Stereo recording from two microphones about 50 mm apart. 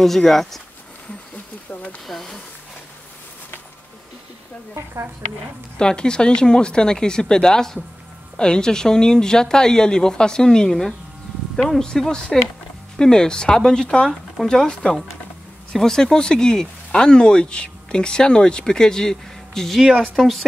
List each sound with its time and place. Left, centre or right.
0.0 s speech: centre
1.7 s a sound: left
2.0 s speech: centre
4.7 s a woman's voice: right
5.8 s speech: centre